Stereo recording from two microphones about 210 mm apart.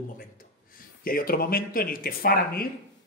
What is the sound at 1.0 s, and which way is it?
Speech, 45° left (ahead or behind).